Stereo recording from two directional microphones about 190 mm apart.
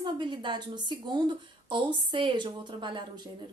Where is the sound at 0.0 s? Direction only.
25° right (ahead or behind).